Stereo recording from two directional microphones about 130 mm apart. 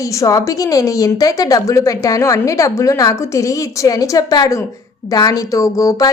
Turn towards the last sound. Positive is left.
turn(degrees=25)  # may be behind; listen again after turning